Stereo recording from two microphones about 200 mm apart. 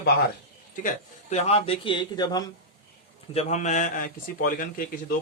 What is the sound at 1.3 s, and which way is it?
A man's voice, 30° left (ahead or behind).